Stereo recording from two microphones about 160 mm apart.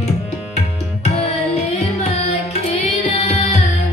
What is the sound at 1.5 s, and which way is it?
Music, 40° left (ahead or behind).